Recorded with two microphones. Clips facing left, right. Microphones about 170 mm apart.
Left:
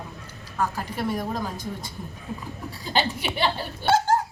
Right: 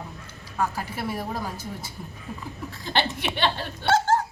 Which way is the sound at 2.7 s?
10° left (ahead or behind).